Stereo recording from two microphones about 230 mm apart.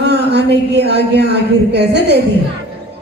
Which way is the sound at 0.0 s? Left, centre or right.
Right.